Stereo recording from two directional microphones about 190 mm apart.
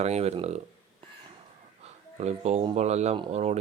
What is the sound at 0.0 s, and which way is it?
Speech, 35° right (ahead or behind).